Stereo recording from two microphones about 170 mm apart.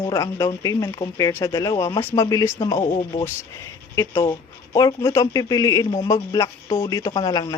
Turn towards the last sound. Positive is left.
turn(degrees=20)  # may be behind; listen again after turning